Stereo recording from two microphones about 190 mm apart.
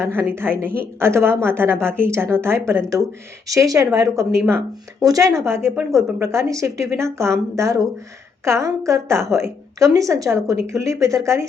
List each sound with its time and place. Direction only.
0.0 s speech: 15° right (ahead or behind)